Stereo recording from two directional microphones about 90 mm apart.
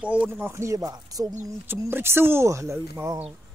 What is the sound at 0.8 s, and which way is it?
Chopping, 45° right (ahead or behind).